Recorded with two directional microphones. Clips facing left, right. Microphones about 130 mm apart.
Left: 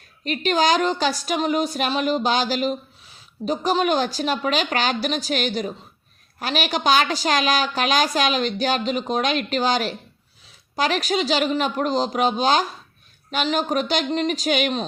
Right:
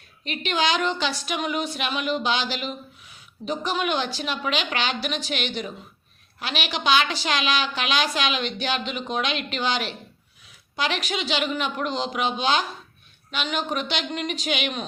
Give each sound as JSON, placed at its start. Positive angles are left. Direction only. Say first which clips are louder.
{"t": 0.3, "sound": "a woman's voice", "louder": "left 5 dB", "side_deg": 40}